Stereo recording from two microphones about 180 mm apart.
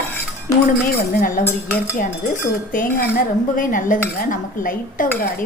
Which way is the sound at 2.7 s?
50° left (ahead or behind).